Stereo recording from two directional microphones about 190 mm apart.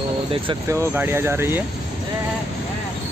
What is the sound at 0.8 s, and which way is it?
Speech, 10° right (ahead or behind).